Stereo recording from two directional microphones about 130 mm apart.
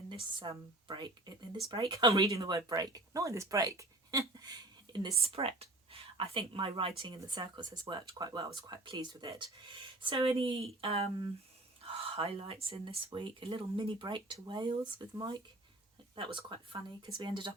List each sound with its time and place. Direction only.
0.1 s speech: 40° right (ahead or behind)
5.2 s speech: 50° right (ahead or behind)